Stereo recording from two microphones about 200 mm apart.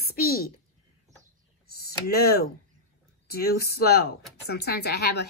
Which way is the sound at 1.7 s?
50° left (ahead or behind).